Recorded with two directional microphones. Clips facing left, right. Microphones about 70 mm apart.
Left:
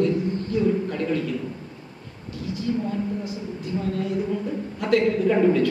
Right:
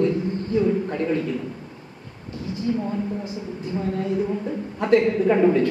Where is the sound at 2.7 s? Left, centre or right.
Right.